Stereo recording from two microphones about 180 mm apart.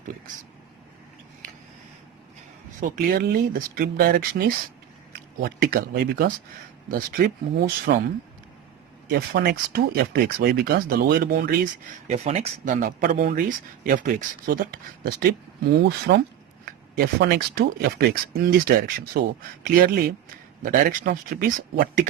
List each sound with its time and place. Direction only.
2.9 s speech: 55° right (ahead or behind)
9.0 s speech: 60° right (ahead or behind)
12.0 s speech: 40° right (ahead or behind); by 15.4 s 55° right (ahead or behind)
15.8 s speech: 75° right (ahead or behind)
17.0 s speech: 60° right (ahead or behind)